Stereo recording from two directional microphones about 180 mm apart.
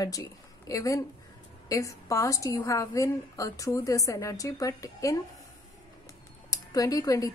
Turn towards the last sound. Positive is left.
turn(degrees=20)  # may be behind; listen again after turning